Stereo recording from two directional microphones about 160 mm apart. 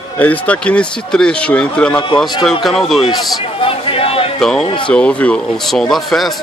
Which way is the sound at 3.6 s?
35° left (ahead or behind).